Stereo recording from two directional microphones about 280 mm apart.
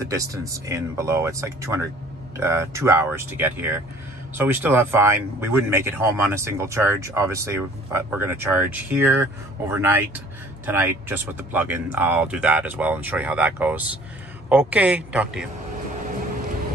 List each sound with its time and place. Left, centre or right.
0.0 s a man's voice: centre